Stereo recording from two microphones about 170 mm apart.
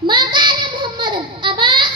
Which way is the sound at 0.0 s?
30° right (ahead or behind).